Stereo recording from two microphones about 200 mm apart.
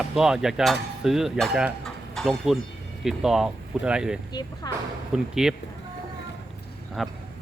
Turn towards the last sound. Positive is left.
turn(degrees=0)  # may be behind; listen again after turning